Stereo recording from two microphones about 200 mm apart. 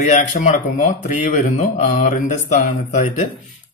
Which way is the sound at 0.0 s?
35° left (ahead or behind).